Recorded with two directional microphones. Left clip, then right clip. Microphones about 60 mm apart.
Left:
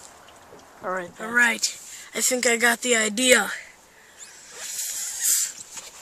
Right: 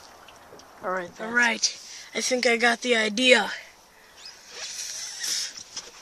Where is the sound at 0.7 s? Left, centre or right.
Centre.